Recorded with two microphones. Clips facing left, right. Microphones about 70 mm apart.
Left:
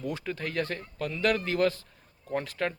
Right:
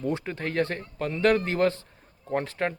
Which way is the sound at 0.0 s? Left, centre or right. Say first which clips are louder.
Right 4 dB; right.